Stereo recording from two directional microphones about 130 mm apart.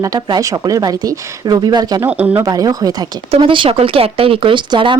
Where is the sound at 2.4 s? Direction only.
30° right (ahead or behind).